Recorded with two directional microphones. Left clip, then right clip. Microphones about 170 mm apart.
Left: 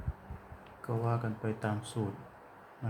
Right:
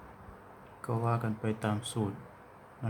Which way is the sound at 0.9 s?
20° right (ahead or behind).